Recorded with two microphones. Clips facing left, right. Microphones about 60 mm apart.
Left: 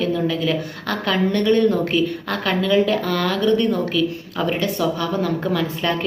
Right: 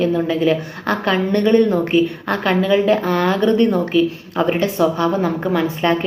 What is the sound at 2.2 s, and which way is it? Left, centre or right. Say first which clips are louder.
A woman's voice: right 4 dB; centre.